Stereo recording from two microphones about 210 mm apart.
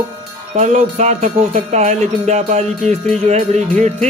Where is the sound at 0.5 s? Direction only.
35° right (ahead or behind).